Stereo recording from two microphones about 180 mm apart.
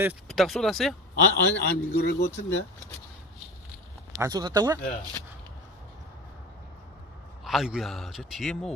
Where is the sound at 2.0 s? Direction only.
65° left (ahead or behind).